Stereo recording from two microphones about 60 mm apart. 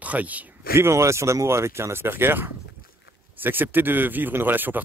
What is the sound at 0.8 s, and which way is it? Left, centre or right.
Speech, right.